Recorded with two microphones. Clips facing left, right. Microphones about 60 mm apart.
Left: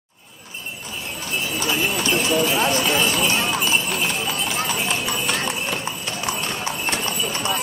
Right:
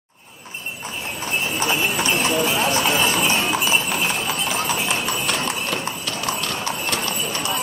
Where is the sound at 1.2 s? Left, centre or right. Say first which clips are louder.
Right 2 dB; right.